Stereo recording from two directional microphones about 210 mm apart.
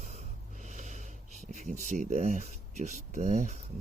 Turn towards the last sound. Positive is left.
turn(degrees=-35)  # may be behind; listen again after turning